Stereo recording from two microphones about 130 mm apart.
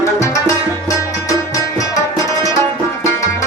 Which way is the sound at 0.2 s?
25° left (ahead or behind).